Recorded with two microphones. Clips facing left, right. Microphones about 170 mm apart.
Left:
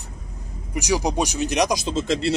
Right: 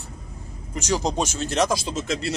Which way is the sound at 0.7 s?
10° left (ahead or behind).